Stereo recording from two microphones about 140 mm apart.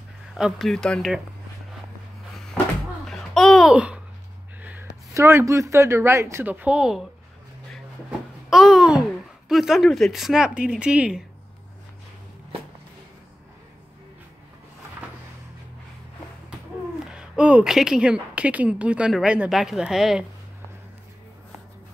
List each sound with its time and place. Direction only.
0.3 s speech: 5° right (ahead or behind)
3.1 s babbling: centre (ahead or behind)
4.6 s a sound: 10° right (ahead or behind)
5.1 s speech: 20° right (ahead or behind); by 7.1 s 5° right (ahead or behind)
8.5 s babbling: 5° right (ahead or behind)
9.5 s speech: centre (ahead or behind)
17.0 s a woman's voice: 5° right (ahead or behind)